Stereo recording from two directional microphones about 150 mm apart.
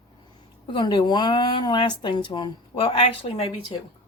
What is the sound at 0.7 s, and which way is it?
Speech, 30° left (ahead or behind).